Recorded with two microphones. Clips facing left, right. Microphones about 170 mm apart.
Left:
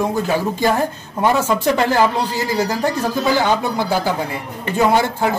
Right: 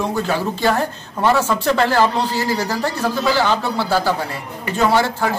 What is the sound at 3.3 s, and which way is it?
Speech, 15° left (ahead or behind).